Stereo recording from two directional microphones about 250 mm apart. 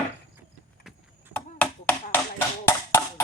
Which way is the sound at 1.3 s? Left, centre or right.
Centre.